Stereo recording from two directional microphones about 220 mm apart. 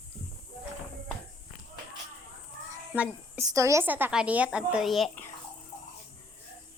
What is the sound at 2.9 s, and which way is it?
A woman's voice, 10° right (ahead or behind).